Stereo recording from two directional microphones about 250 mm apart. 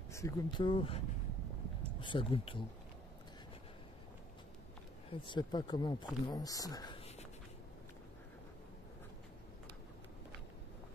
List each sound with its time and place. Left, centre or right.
0.1 s speech: centre
5.1 s speech: centre